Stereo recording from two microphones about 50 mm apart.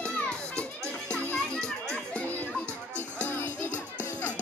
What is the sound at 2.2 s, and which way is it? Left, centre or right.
Children playing, left.